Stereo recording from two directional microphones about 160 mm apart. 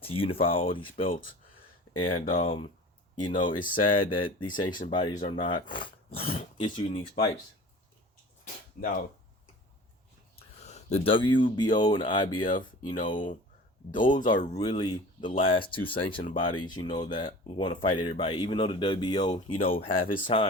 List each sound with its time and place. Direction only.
0.0 s speech: 35° left (ahead or behind)
10.3 s a sound: 40° left (ahead or behind)
11.5 s speech: 25° left (ahead or behind)
14.3 s speech: 45° left (ahead or behind)
14.6 s speech: 30° left (ahead or behind)